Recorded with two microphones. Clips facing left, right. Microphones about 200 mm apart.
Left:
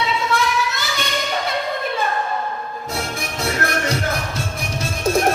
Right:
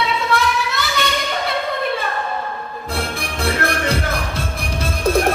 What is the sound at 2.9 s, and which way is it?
Music, 55° right (ahead or behind).